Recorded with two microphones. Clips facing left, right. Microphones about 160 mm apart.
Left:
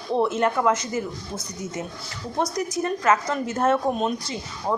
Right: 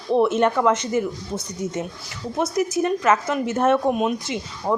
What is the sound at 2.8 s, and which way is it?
A woman's voice, 20° right (ahead or behind).